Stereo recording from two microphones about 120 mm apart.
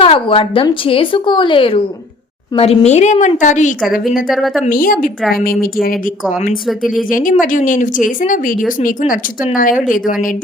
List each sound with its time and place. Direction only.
0.0 s a woman's voice: 50° left (ahead or behind)
2.6 s a woman's voice: 60° left (ahead or behind); by 3.8 s 90° left
3.8 s a woman's voice: centre (ahead or behind)
4.6 s speech: 90° left
6.7 s a woman's voice: centre (ahead or behind)
7.3 s speech: 90° left
9.4 s speech: 10° right (ahead or behind)